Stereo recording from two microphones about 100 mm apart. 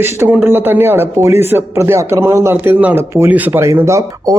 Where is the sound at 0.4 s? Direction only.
20° right (ahead or behind).